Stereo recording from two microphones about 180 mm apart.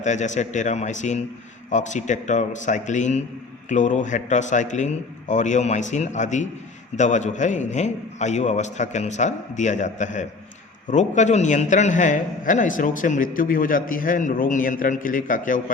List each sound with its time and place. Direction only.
0.0 s a man's voice: 40° left (ahead or behind)